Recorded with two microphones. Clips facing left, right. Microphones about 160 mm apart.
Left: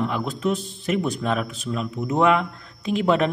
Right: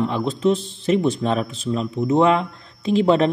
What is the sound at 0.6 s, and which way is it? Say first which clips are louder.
Speech: left 1 dB; centre (ahead or behind).